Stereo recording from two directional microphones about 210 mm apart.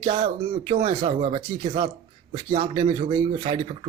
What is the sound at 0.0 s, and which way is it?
A man's voice, 25° right (ahead or behind).